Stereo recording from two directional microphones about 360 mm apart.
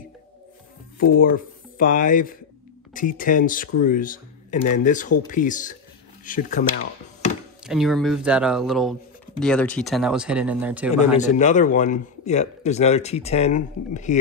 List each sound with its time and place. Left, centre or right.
1.2 s a man's voice: left
7.6 s speech: centre
11.1 s a man's voice: centre